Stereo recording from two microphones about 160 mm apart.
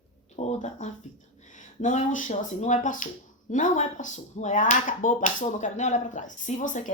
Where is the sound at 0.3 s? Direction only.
45° left (ahead or behind).